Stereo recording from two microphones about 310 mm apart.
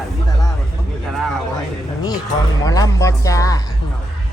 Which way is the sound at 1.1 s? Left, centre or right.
Centre.